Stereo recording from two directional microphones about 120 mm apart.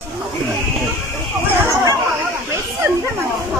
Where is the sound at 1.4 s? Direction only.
25° right (ahead or behind).